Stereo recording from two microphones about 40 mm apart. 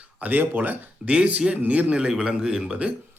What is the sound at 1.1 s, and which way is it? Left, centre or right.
Speech, right.